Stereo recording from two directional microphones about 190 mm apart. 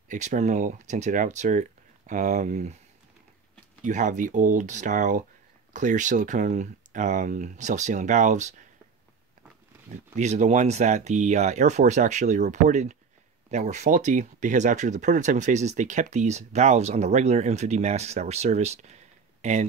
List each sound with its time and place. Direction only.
0.1 s speech: 40° right (ahead or behind)
3.8 s speech: 40° right (ahead or behind)
10.1 s speech: 35° right (ahead or behind)